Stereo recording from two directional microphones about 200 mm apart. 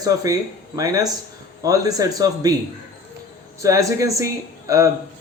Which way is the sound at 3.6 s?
15° right (ahead or behind).